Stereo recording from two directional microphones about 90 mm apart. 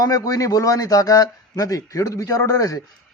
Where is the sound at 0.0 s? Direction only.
40° left (ahead or behind).